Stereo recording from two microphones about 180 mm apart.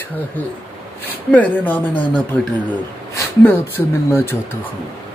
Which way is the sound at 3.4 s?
10° left (ahead or behind).